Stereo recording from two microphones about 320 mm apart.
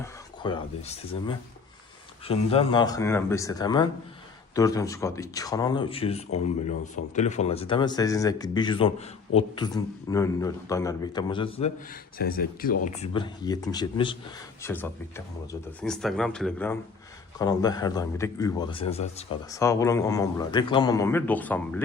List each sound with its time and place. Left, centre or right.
0.0 s a man's voice: centre
12.1 s speech: left
12.8 s a man's voice: centre